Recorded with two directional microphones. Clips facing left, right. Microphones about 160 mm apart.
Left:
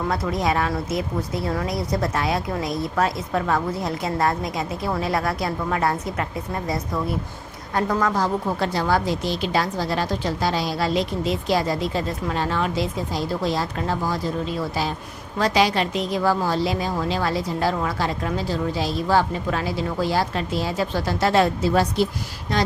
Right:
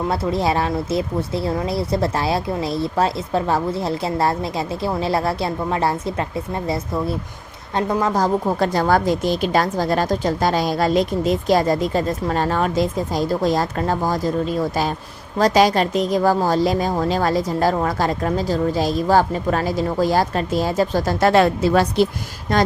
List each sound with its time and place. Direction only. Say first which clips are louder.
0.1 s speech: right 2 dB; 30° right (ahead or behind)
8.1 s speech: right 4 dB; 45° right (ahead or behind); by 22.0 s 70° right (ahead or behind)
22.5 s speech: right 5 dB; 50° right (ahead or behind)